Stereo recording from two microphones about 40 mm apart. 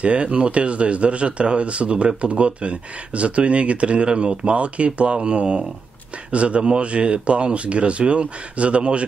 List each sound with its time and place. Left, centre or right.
0.0 s speech: right